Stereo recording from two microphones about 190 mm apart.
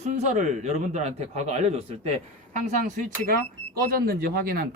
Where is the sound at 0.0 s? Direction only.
35° right (ahead or behind).